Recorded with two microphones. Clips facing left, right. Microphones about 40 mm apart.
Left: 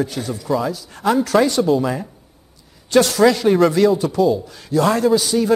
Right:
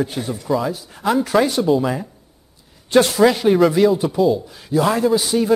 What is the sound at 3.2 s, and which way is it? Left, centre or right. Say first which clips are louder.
A man's voice: even; centre.